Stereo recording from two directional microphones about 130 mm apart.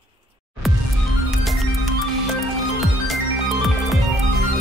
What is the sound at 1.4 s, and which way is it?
Music, centre (ahead or behind).